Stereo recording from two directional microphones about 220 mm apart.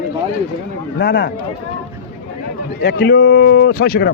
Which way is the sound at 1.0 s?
55° left (ahead or behind).